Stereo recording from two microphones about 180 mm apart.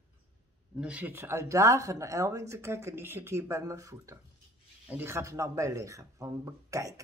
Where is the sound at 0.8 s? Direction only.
10° right (ahead or behind).